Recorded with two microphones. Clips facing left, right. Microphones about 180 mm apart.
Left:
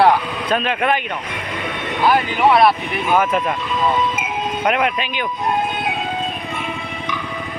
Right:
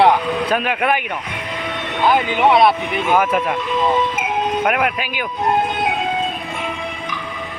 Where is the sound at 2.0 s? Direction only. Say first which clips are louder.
Even; 20° right (ahead or behind).